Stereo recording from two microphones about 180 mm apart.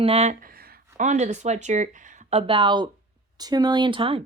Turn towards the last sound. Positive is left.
turn(degrees=-30)  # may be behind; listen again after turning